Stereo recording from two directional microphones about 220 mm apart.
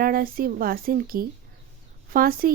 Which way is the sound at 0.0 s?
40° right (ahead or behind).